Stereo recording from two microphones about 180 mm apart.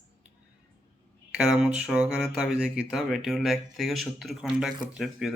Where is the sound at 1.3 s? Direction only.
Centre (ahead or behind).